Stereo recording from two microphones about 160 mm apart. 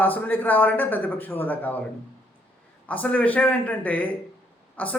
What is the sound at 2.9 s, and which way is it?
A man's voice, 10° left (ahead or behind).